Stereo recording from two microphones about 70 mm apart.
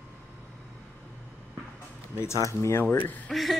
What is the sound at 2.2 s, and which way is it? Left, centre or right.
Speech, left.